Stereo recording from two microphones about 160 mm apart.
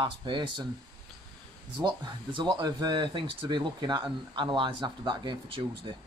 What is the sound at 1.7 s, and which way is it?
Speech, 30° right (ahead or behind).